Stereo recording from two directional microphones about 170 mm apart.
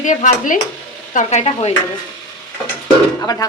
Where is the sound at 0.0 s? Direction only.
45° left (ahead or behind).